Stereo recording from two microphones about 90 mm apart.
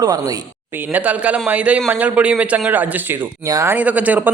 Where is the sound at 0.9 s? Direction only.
15° right (ahead or behind).